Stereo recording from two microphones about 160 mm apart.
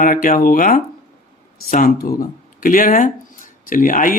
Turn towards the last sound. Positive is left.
turn(degrees=55)  # may be behind; listen again after turning